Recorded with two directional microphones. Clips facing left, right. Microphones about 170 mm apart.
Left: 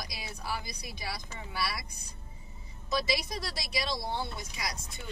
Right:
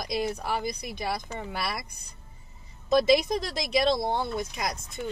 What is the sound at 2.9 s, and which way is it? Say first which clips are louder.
Speech: right 11 dB; 50° right (ahead or behind).